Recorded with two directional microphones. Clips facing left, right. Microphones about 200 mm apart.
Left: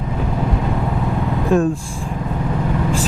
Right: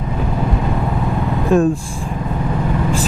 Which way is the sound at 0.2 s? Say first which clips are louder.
Right 1 dB; 20° right (ahead or behind).